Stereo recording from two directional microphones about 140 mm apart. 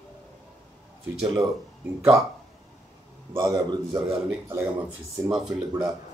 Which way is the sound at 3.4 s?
30° right (ahead or behind).